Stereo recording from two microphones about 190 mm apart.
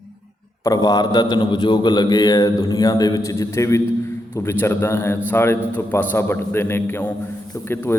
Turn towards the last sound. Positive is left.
turn(degrees=10)  # may be behind; listen again after turning